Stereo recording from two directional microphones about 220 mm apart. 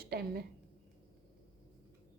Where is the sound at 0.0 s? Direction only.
45° right (ahead or behind).